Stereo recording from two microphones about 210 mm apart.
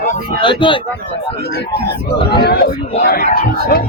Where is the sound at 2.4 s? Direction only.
50° left (ahead or behind).